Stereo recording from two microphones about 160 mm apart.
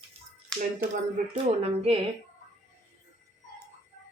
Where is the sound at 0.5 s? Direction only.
5° left (ahead or behind).